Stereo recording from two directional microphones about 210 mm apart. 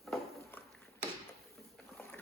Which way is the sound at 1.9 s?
5° left (ahead or behind).